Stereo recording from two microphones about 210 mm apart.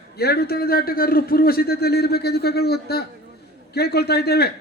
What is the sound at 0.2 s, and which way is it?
A man's voice, 50° left (ahead or behind).